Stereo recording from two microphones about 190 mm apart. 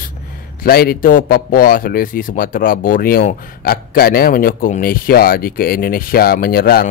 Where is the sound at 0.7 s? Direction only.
50° left (ahead or behind).